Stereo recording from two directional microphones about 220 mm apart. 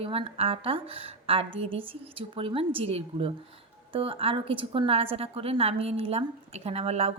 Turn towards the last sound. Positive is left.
turn(degrees=-30)  # may be behind; listen again after turning